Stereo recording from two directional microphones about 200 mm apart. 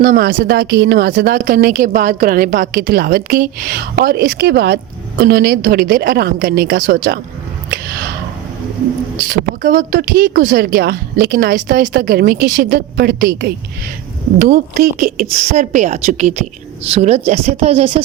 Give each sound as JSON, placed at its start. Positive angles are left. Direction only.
{"t": 0.0, "sound": "speech", "side_deg": -40}
{"t": 9.2, "sound": "a woman's voice", "side_deg": -45}